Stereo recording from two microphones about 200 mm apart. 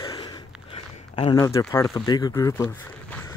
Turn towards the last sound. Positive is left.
turn(degrees=15)  # may be behind; listen again after turning